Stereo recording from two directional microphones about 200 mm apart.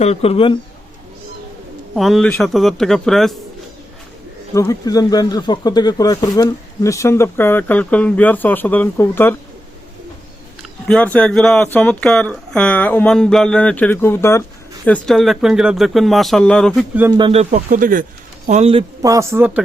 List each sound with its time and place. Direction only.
0.0 s speech: 30° left (ahead or behind)
2.0 s speech: centre (ahead or behind)
4.5 s speech: 15° left (ahead or behind)
10.6 s speech: 5° left (ahead or behind)
17.1 s speech: 25° right (ahead or behind)
17.5 s speech: 40° right (ahead or behind)
19.0 s a man's voice: 15° right (ahead or behind)